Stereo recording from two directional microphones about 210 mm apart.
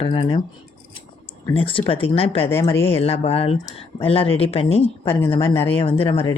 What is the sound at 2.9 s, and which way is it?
Speech, 30° left (ahead or behind).